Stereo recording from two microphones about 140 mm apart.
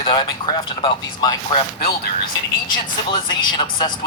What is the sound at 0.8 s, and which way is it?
Speech, 30° left (ahead or behind).